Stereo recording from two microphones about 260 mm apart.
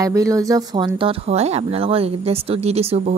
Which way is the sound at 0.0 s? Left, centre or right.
Centre.